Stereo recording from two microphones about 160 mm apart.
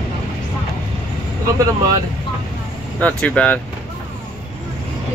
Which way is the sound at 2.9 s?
10° left (ahead or behind).